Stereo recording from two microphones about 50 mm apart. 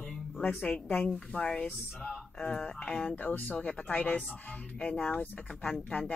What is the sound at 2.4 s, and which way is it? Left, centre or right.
Music, centre.